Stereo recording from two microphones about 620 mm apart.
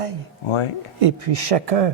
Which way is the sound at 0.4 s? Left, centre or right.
Left.